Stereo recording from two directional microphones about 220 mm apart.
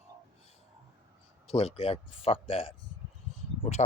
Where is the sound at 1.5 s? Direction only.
25° left (ahead or behind).